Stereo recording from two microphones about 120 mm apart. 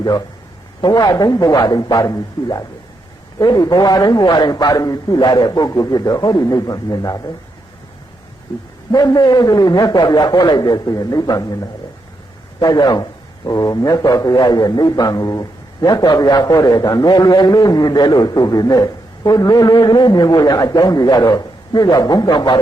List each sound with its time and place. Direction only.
0.8 s a man's voice: 35° left (ahead or behind)
8.9 s a man's voice: 35° left (ahead or behind)